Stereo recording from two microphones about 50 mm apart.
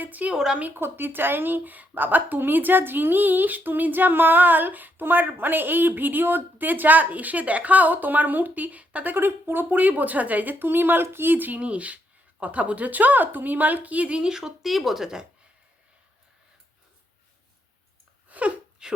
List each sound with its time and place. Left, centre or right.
0.0 s a woman's voice: right
0.3 s speech: centre
0.8 s a woman's voice: right
9.1 s a woman's voice: right
11.6 s a woman's voice: right
14.2 s speech: centre
18.3 s a sound: right
18.8 s a sound: centre